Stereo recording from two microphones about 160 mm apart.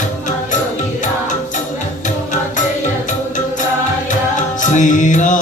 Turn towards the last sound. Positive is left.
turn(degrees=50)  # may be behind; listen again after turning